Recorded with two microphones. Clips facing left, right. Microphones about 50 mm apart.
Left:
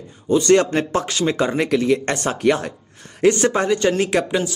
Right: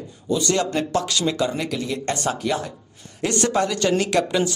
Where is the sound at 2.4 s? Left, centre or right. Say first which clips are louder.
Left 6 dB; left.